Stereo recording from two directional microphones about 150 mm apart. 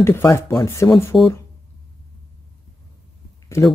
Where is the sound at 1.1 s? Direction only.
Centre (ahead or behind).